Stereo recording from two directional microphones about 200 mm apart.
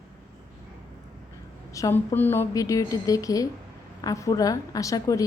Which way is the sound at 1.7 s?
15° left (ahead or behind).